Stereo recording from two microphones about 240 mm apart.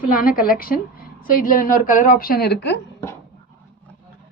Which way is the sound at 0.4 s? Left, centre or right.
Left.